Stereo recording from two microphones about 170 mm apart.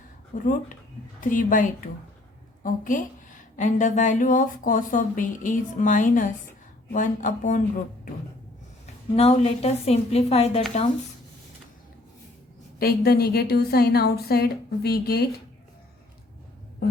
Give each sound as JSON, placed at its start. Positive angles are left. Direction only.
{"t": 0.3, "sound": "a woman's voice", "side_deg": 50}
{"t": 9.1, "sound": "a woman's voice", "side_deg": 35}
{"t": 12.8, "sound": "a woman's voice", "side_deg": 65}